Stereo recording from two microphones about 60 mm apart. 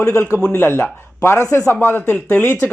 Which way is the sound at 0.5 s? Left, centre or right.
Left.